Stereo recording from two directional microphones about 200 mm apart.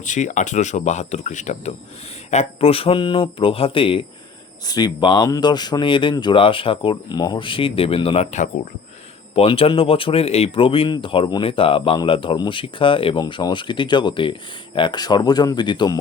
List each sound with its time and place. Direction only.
0.0 s speech: 40° left (ahead or behind); by 16.0 s 20° left (ahead or behind)